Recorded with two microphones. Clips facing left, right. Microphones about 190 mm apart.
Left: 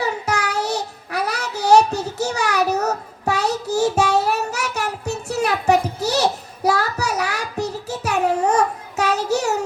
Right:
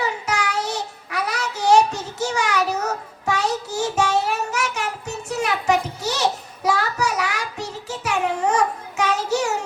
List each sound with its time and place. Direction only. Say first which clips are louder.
0.0 s child singing: left 2 dB; 40° left (ahead or behind)